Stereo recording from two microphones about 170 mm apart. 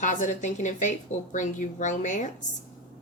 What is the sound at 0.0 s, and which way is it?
A woman's voice, 45° left (ahead or behind).